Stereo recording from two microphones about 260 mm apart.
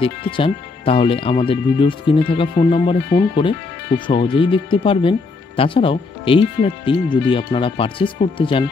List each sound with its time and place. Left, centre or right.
0.0 s speech: left